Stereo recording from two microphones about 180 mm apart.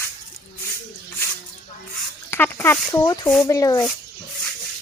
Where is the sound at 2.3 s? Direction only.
10° left (ahead or behind).